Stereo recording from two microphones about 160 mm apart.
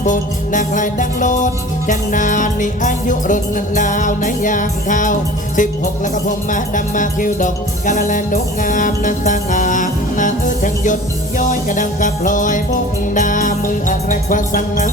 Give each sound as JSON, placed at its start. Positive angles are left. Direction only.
{"t": 0.0, "sound": "music", "side_deg": 55}